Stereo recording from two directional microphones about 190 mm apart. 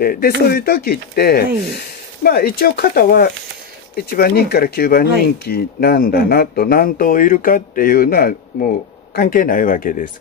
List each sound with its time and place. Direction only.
0.0 s speech: 55° left (ahead or behind)